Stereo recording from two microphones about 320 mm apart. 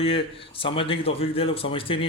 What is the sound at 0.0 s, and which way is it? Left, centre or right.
Speech, centre.